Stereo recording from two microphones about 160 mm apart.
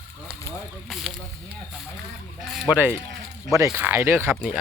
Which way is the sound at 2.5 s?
Centre (ahead or behind).